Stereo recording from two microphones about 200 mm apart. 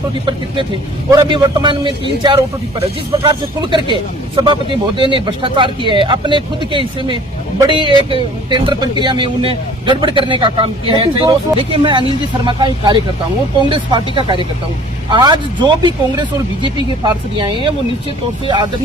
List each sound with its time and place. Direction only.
1.1 s speech: 20° right (ahead or behind)
4.9 s speech: 25° right (ahead or behind)